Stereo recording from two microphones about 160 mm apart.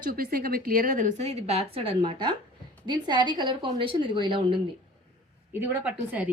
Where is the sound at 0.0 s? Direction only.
65° right (ahead or behind); by 4.6 s 30° right (ahead or behind).